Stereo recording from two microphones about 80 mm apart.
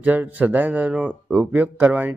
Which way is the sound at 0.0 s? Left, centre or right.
Centre.